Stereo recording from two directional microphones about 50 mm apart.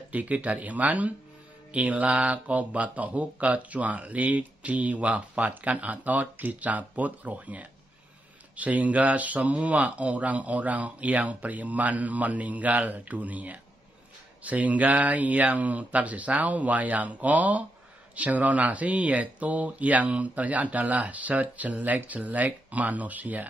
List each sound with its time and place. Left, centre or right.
0.1 s speech: right